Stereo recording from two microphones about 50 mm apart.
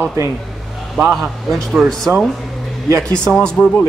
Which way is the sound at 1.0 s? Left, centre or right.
Centre.